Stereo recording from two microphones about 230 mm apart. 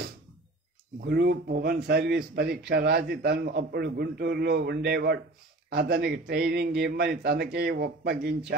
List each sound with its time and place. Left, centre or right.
1.0 s a man's voice: right